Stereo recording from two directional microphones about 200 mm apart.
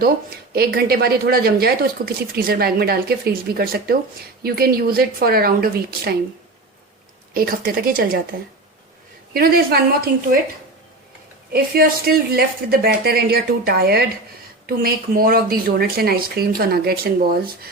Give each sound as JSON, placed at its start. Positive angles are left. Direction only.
{"t": 0.5, "sound": "speech", "side_deg": -50}
{"t": 7.3, "sound": "speech", "side_deg": -45}
{"t": 9.3, "sound": "speech", "side_deg": -50}
{"t": 11.5, "sound": "speech", "side_deg": -50}